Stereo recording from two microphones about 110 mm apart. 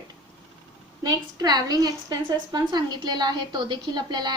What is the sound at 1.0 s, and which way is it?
A woman's voice, 35° right (ahead or behind).